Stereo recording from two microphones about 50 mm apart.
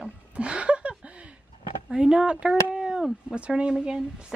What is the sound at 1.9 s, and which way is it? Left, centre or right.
Speech, centre.